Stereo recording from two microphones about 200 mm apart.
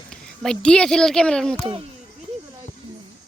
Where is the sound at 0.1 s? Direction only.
5° left (ahead or behind).